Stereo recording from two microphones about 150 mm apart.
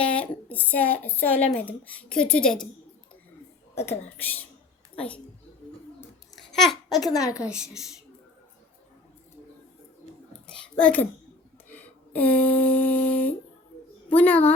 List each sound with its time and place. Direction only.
0.0 s speech: 10° left (ahead or behind)
3.8 s a woman's voice: 15° left (ahead or behind)
6.3 s babbling: centre (ahead or behind)
7.0 s a woman's voice: 25° left (ahead or behind)
7.3 s a woman's voice: 5° right (ahead or behind)
10.4 s a sound: 10° left (ahead or behind)
14.1 s speech: 10° left (ahead or behind)